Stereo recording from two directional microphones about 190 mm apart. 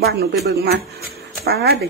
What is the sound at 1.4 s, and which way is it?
Speech, 55° right (ahead or behind).